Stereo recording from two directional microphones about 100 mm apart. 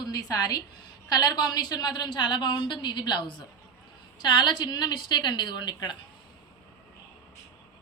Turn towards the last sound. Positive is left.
turn(degrees=45)  # may be behind; listen again after turning